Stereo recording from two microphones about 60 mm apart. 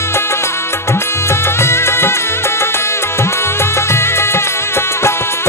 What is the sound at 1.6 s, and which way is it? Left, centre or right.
Music, left.